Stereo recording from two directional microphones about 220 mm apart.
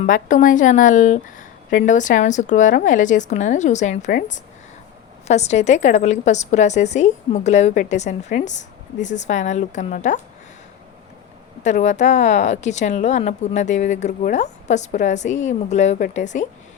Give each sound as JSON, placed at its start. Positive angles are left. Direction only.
{"t": 0.0, "sound": "a woman's voice", "side_deg": 35}
{"t": 11.6, "sound": "a woman's voice", "side_deg": 35}